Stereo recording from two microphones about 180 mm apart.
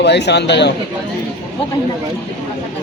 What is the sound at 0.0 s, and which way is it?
Speech, 70° left (ahead or behind).